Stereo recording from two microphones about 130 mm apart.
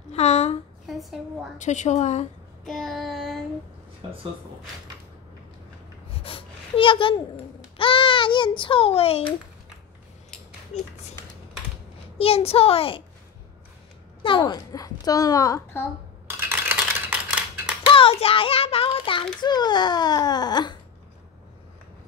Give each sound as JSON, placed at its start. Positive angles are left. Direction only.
{"t": 0.1, "sound": "a sound", "side_deg": 55}
{"t": 0.8, "sound": "a woman's voice", "side_deg": 0}
{"t": 1.6, "sound": "a woman's voice", "side_deg": 65}
{"t": 2.6, "sound": "child singing", "side_deg": 0}
{"t": 6.2, "sound": "a sound", "side_deg": 45}
{"t": 12.2, "sound": "a child's voice", "side_deg": 50}
{"t": 14.2, "sound": "speech", "side_deg": 35}
{"t": 16.3, "sound": "a sound", "side_deg": -15}
{"t": 17.8, "sound": "child singing", "side_deg": 45}
{"t": 19.4, "sound": "a child's voice", "side_deg": 35}